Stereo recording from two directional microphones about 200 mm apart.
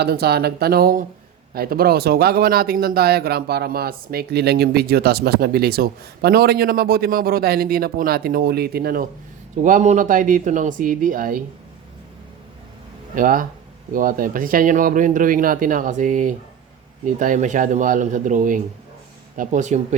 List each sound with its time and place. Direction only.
0.0 s speech: 50° right (ahead or behind)
13.1 s speech: 45° right (ahead or behind)